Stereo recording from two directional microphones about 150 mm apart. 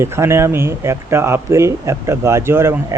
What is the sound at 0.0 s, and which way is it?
Speech, 15° right (ahead or behind).